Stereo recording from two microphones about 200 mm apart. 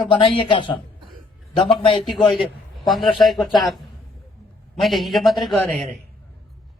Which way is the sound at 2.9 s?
Centre (ahead or behind).